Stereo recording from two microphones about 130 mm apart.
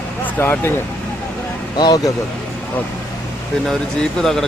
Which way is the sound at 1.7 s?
35° left (ahead or behind).